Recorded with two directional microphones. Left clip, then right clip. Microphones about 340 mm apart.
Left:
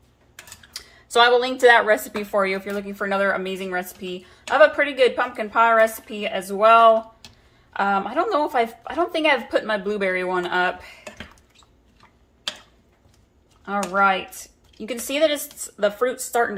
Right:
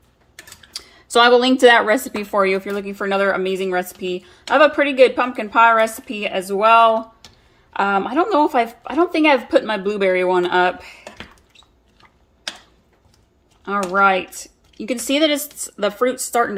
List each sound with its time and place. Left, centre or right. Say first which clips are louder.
0.7 s speech: right 4 dB; right
13.7 s speech: right 4 dB; right